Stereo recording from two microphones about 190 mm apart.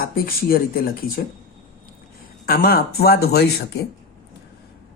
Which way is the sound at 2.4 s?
50° left (ahead or behind).